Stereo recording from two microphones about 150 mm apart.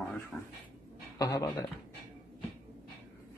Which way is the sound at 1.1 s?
25° left (ahead or behind).